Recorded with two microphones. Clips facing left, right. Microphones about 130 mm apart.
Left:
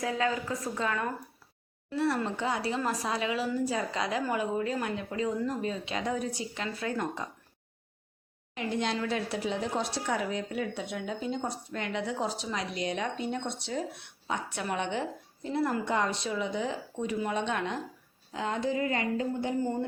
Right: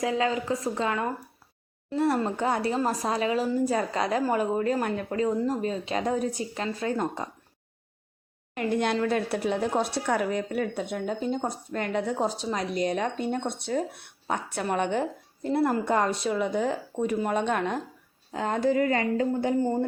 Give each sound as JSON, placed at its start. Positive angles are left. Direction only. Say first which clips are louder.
{"t": 0.0, "sound": "a woman's voice", "louder": "right 4 dB", "side_deg": -30}
{"t": 2.1, "sound": "speech", "louder": "right 5 dB", "side_deg": -45}
{"t": 8.5, "sound": "speech", "louder": "right 5 dB", "side_deg": -55}
{"t": 18.9, "sound": "a woman's voice", "louder": "right 5 dB", "side_deg": -90}
{"t": 19.3, "sound": "speech", "louder": "right 5 dB", "side_deg": -45}